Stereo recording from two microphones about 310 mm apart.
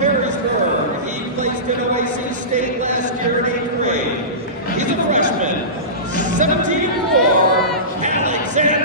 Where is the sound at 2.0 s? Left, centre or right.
Right.